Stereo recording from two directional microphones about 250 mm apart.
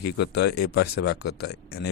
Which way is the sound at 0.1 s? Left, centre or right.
Left.